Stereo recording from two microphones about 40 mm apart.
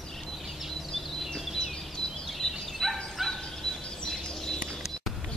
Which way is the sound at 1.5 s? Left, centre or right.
Centre.